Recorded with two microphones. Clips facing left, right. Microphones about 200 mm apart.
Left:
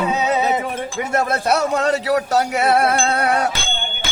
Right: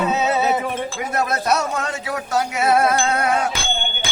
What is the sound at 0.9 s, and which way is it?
Music, 25° left (ahead or behind).